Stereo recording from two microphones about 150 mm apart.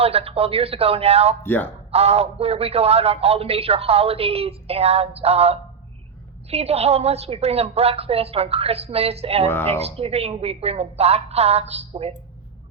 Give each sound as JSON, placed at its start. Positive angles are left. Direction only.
{"t": 0.0, "sound": "a woman's voice", "side_deg": -40}
{"t": 1.5, "sound": "speech", "side_deg": 10}
{"t": 1.9, "sound": "a man's voice", "side_deg": -45}